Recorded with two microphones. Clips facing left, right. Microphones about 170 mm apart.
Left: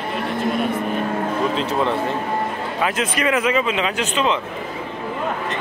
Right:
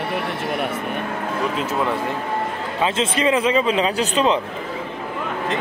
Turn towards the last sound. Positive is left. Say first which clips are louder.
# right 2 dB
turn(degrees=-35)  # may be behind; listen again after turning